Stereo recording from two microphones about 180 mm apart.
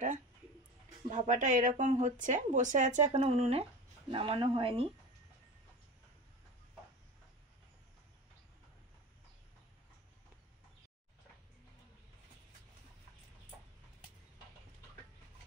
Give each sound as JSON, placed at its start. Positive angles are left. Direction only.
{"t": 1.1, "sound": "speech", "side_deg": -40}